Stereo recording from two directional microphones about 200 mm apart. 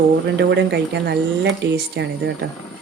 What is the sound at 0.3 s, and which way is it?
Speech, 60° right (ahead or behind).